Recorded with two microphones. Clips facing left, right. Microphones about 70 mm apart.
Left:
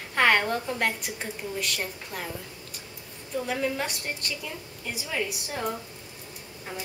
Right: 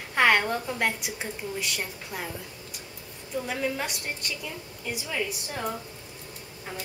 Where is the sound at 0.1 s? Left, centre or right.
Centre.